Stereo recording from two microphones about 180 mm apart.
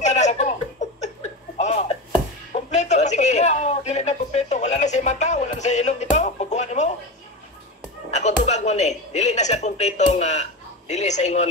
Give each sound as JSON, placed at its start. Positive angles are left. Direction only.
{"t": 0.0, "sound": "chuckle", "side_deg": 40}
{"t": 1.6, "sound": "a sound", "side_deg": 40}
{"t": 8.1, "sound": "a woman's voice", "side_deg": 40}